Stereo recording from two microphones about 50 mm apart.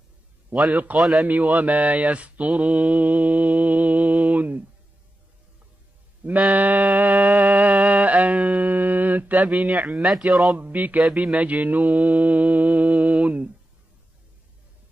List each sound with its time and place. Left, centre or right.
0.9 s speech: centre
1.2 s mantra: right
6.5 s music: right
9.7 s speech: right
9.9 s speech: centre
10.5 s mantra: right